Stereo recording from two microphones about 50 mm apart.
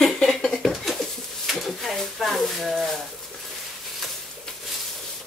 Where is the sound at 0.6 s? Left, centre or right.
Centre.